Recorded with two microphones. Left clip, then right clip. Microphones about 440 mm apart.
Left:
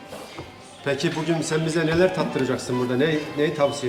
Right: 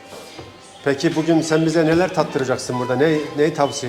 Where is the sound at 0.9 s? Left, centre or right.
Right.